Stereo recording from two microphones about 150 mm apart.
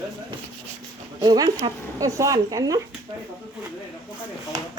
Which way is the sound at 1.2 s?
25° right (ahead or behind).